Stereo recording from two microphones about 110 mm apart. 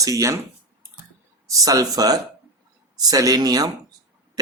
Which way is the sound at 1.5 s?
35° right (ahead or behind).